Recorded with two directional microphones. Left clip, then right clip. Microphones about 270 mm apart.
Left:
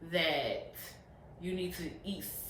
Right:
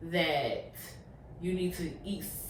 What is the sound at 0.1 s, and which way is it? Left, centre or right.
Speech, centre.